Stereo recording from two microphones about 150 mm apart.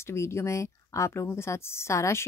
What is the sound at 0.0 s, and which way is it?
Speech, 20° left (ahead or behind).